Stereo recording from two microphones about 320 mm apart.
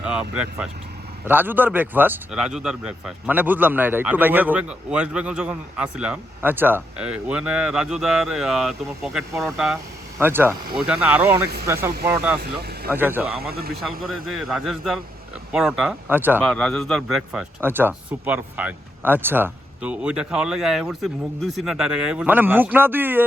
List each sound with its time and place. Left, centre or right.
0.0 s speech: centre
12.4 s speech: right
12.9 s speech: centre
13.4 s speech: right
14.0 s speech: centre